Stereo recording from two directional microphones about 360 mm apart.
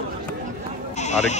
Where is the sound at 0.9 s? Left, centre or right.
Centre.